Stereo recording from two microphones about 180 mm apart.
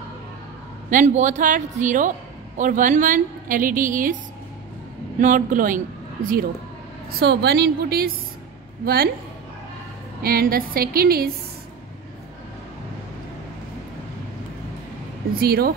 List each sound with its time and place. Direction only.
0.8 s a woman's voice: 45° right (ahead or behind)
5.2 s a woman's voice: 45° right (ahead or behind)
7.2 s a woman's voice: 65° right (ahead or behind)
10.2 s a woman's voice: 55° right (ahead or behind)
15.3 s a woman's voice: 55° right (ahead or behind)